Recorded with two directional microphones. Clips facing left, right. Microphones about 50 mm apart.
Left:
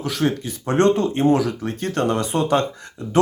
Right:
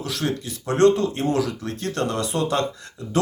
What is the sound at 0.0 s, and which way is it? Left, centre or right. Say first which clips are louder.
Speech: left 4 dB; left.